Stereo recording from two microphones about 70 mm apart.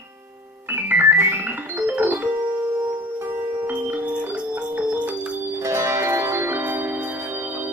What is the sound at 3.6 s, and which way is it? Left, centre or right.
Music, right.